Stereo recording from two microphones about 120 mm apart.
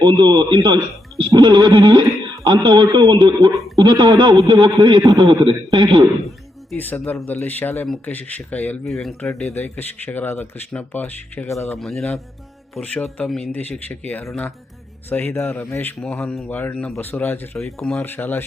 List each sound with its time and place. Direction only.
0.0 s a man's voice: 35° right (ahead or behind)
5.3 s speech: 30° right (ahead or behind)
6.7 s speech: 5° left (ahead or behind)
8.9 s speech: centre (ahead or behind)
9.5 s speech: 15° left (ahead or behind)
11.8 s speech: centre (ahead or behind); by 17.6 s 20° left (ahead or behind)
17.6 s speech: 5° left (ahead or behind)
18.0 s speech: 20° left (ahead or behind)